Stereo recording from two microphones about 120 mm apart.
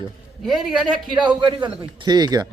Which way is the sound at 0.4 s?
5° right (ahead or behind).